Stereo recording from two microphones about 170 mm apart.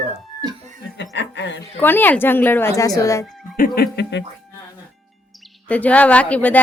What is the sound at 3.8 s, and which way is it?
Speech, 90° left.